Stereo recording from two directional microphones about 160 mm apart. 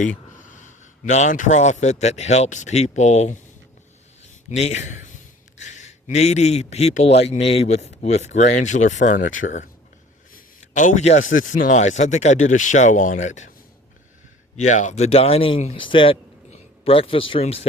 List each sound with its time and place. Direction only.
0.0 s a man's voice: 50° left (ahead or behind)
14.5 s speech: 50° left (ahead or behind)